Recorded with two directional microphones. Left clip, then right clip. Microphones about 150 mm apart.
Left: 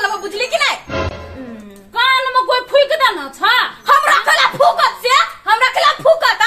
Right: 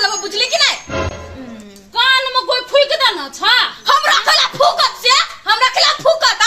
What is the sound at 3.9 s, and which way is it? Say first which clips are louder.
Snicker: left 2 dB; 10° left (ahead or behind).